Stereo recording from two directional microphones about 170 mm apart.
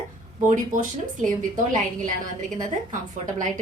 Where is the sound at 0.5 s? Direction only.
50° right (ahead or behind).